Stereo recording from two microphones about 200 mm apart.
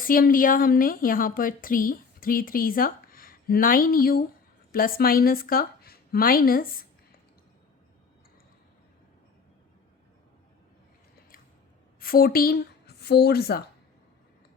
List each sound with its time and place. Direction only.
0.0 s a woman's voice: 45° left (ahead or behind)
11.9 s a woman's voice: 45° left (ahead or behind)